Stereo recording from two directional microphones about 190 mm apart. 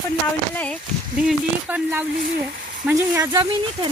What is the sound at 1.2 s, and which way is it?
A woman's voice, 10° right (ahead or behind).